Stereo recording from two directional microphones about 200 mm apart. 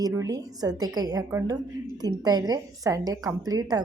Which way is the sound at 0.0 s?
15° right (ahead or behind).